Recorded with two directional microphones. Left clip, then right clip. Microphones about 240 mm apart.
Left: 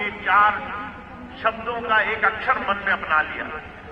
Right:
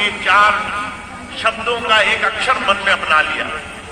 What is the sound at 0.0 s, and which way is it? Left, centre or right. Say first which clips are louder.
Music: right 6 dB; right.